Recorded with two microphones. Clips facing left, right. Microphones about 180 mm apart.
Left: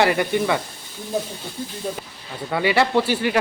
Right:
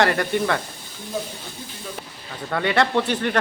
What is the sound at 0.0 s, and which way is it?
Speech, 5° left (ahead or behind).